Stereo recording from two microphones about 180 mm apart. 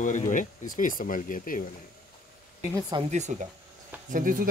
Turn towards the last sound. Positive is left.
turn(degrees=-50)  # may be behind; listen again after turning